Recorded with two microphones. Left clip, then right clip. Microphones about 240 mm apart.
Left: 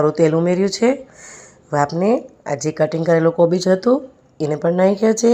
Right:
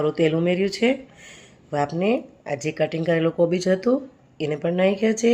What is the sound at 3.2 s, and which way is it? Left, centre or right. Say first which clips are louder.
Speech: left 6 dB; centre.